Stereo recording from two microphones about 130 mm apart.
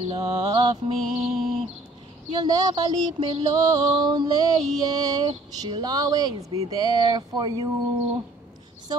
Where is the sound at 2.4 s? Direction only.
35° right (ahead or behind).